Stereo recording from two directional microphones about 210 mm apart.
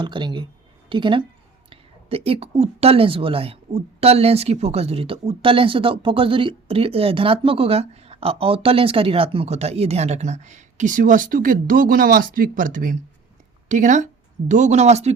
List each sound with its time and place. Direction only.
0.0 s a woman's voice: 20° right (ahead or behind)